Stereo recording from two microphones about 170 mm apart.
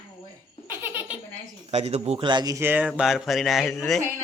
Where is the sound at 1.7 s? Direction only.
40° right (ahead or behind); by 3.8 s centre (ahead or behind).